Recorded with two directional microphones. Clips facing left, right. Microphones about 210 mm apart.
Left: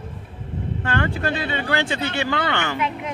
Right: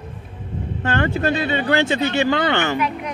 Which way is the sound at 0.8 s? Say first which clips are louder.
Right 4 dB; 25° right (ahead or behind).